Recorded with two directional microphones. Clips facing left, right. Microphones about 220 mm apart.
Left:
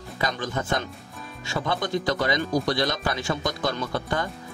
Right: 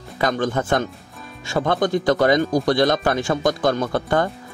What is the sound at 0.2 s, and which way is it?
Speech, 50° right (ahead or behind).